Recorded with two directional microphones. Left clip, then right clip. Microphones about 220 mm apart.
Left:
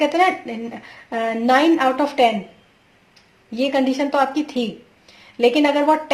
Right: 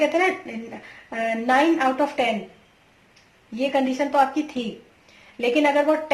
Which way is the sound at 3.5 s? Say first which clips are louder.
Left 3 dB; 40° left (ahead or behind).